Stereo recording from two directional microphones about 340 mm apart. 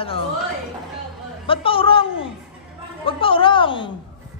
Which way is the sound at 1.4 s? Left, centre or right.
Centre.